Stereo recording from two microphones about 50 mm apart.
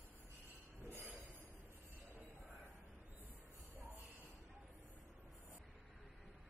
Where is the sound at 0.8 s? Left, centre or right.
Right.